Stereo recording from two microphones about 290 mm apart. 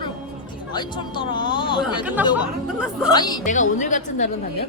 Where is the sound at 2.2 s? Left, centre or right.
Centre.